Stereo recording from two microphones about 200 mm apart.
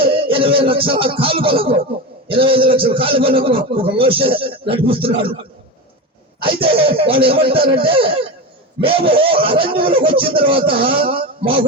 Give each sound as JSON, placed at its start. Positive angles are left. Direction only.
{"t": 0.0, "sound": "a man's voice", "side_deg": -25}
{"t": 6.4, "sound": "a man's voice", "side_deg": -25}